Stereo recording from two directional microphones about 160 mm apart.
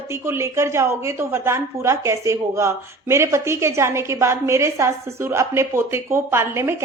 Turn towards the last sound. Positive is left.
turn(degrees=-15)  # may be behind; listen again after turning